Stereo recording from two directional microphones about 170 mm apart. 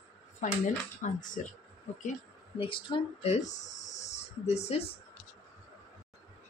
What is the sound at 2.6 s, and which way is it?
Speech, 30° left (ahead or behind).